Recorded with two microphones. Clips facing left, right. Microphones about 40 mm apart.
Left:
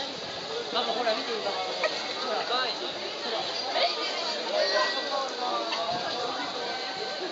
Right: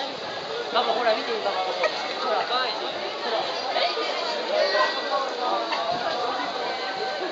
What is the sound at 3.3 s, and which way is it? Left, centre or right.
Chatter, centre.